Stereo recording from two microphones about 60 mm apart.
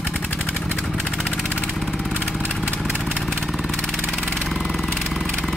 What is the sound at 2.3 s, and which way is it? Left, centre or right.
Vehicle, right.